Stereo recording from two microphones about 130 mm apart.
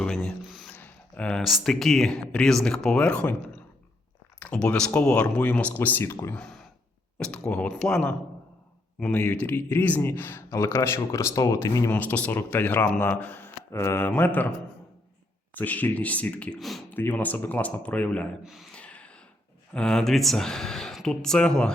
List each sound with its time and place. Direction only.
0.0 s a sound: 5° left (ahead or behind)
0.8 s speech: 10° left (ahead or behind)
15.5 s speech: 10° left (ahead or behind)
16.9 s speech: 15° left (ahead or behind)
18.7 s a sound: 10° left (ahead or behind)
19.7 s speech: 5° left (ahead or behind)